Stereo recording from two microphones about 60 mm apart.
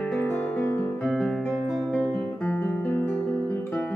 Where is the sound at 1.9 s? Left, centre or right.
Centre.